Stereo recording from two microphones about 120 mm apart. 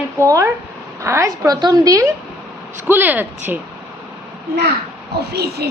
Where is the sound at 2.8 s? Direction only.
15° right (ahead or behind).